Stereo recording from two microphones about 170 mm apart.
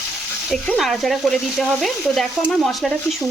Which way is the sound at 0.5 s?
Centre (ahead or behind).